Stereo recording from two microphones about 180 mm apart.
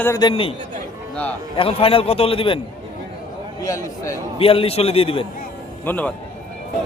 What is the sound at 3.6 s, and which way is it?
Speech, 15° left (ahead or behind).